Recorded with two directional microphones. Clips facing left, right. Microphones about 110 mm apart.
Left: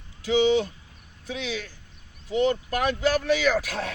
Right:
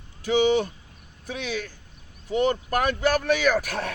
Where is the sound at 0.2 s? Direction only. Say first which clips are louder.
Even; 50° right (ahead or behind).